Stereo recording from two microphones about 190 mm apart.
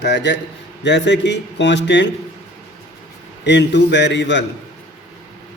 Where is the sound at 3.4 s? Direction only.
65° left (ahead or behind).